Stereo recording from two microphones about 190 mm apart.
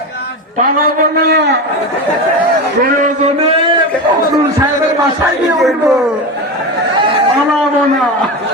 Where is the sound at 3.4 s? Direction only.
30° right (ahead or behind).